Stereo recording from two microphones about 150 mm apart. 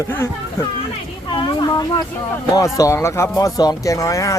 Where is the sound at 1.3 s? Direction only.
30° left (ahead or behind).